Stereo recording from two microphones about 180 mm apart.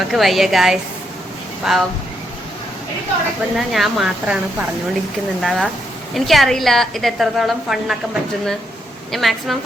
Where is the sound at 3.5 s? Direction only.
Centre (ahead or behind).